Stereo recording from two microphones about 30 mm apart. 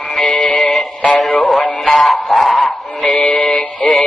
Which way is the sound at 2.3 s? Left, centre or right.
Centre.